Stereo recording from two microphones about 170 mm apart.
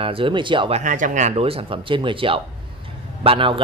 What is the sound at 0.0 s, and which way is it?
A man's voice, 30° right (ahead or behind).